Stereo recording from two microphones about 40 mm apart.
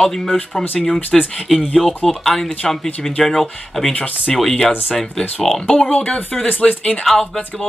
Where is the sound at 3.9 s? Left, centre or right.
Left.